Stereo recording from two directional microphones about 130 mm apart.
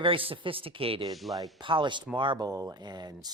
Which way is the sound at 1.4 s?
40° right (ahead or behind).